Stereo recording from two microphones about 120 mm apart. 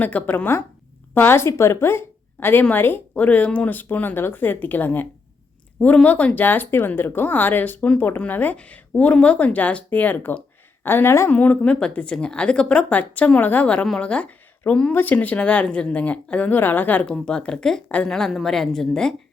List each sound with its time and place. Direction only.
0.0 s speech: 10° left (ahead or behind)